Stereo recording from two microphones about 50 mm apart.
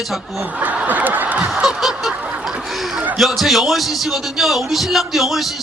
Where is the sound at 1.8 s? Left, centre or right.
Centre.